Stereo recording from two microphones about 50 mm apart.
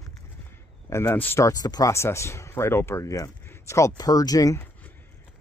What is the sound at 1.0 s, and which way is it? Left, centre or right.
Speech, left.